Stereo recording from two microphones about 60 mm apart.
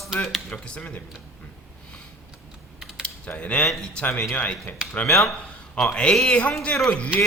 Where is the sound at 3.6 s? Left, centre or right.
Centre.